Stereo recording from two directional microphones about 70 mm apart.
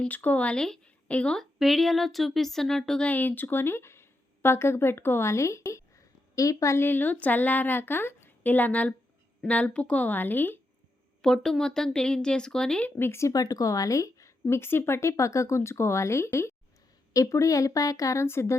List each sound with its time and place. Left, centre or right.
0.1 s a woman's voice: left
1.4 s speech: centre
3.0 s speech: left
6.7 s a woman's voice: left
11.2 s speech: centre
13.0 s speech: left
13.3 s speech: left
14.4 s speech: left